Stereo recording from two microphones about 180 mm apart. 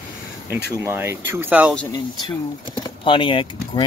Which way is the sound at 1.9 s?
25° left (ahead or behind).